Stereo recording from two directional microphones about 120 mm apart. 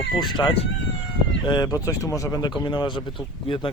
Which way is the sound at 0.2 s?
40° left (ahead or behind).